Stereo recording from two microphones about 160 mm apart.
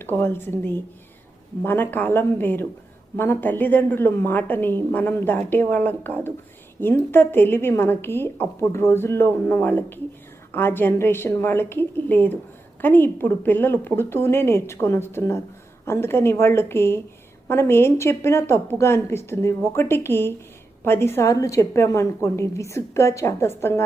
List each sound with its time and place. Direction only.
0.0 s a woman's voice: 15° left (ahead or behind)
1.6 s a woman's voice: 15° left (ahead or behind)